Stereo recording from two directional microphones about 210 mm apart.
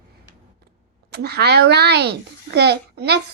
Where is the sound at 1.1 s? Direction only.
50° right (ahead or behind).